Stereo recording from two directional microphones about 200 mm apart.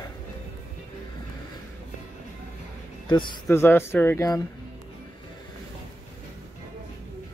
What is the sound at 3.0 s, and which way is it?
Speech, 20° left (ahead or behind).